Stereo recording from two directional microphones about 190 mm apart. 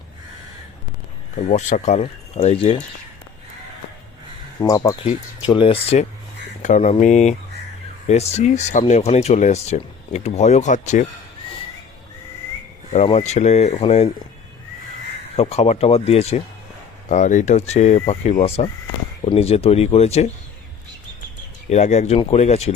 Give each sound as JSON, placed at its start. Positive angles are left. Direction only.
{"t": 1.4, "sound": "speech", "side_deg": 40}
{"t": 4.6, "sound": "speech", "side_deg": 15}
{"t": 5.5, "sound": "speech", "side_deg": 25}
{"t": 12.9, "sound": "speech", "side_deg": 35}
{"t": 15.4, "sound": "speech", "side_deg": 35}
{"t": 21.7, "sound": "speech", "side_deg": 35}